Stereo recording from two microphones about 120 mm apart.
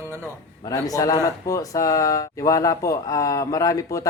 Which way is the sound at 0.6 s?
30° left (ahead or behind).